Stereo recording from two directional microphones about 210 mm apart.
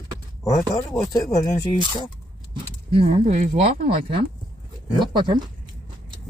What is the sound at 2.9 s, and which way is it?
Speech, 30° right (ahead or behind).